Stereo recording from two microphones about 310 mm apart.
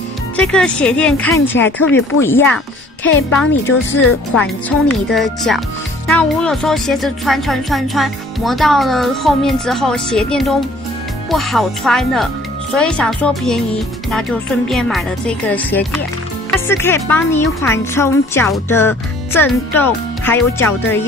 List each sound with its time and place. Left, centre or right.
0.4 s speech: centre
4.6 s speech: centre